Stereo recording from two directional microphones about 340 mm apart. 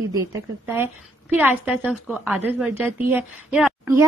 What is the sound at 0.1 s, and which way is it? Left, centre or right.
A woman's voice, centre.